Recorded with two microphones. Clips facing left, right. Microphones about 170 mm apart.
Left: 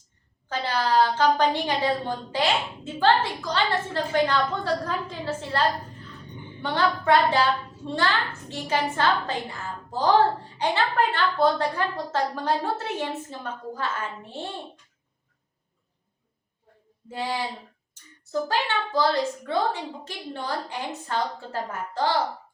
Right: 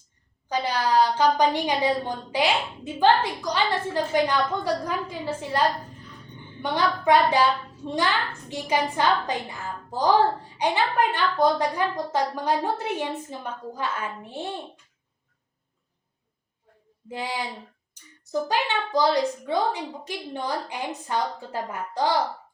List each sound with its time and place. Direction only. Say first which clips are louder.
0.4 s a woman's voice: right 1 dB; 15° right (ahead or behind)
10.6 s a woman's voice: right 1 dB; 15° right (ahead or behind)
17.1 s a woman's voice: left 2 dB; 15° right (ahead or behind)